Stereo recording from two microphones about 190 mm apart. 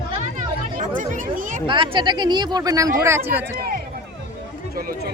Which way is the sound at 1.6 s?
25° right (ahead or behind).